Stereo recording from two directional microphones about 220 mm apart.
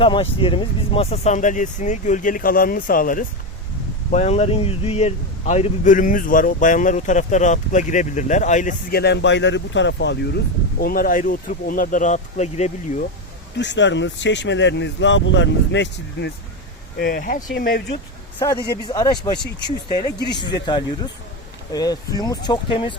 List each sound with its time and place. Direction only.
0.0 s a man's voice: 25° left (ahead or behind)
13.6 s speech: 55° left (ahead or behind)
17.0 s a man's voice: 40° left (ahead or behind)
18.3 s a man's voice: 15° left (ahead or behind)